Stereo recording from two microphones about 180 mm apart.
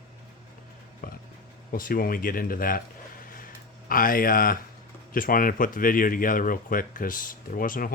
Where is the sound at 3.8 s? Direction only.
50° left (ahead or behind).